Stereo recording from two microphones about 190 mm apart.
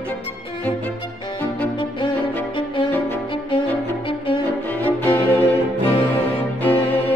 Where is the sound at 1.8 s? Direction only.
25° left (ahead or behind).